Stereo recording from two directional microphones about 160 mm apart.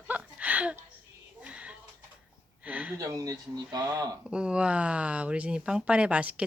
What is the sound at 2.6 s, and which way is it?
Speech, 10° right (ahead or behind).